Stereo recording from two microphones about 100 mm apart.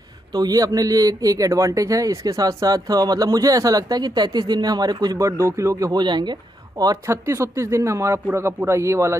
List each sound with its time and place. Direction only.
0.3 s a man's voice: 40° right (ahead or behind)
7.1 s speech: 30° right (ahead or behind)